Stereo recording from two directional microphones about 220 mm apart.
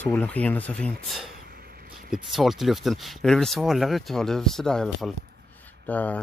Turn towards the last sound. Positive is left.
turn(degrees=5)  # may be behind; listen again after turning